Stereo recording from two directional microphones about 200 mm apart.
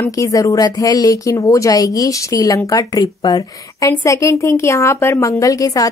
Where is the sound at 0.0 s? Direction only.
15° left (ahead or behind).